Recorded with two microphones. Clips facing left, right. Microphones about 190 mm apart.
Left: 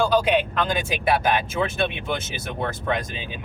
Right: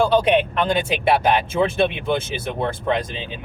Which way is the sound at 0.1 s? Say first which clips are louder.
Right 3 dB; 30° right (ahead or behind).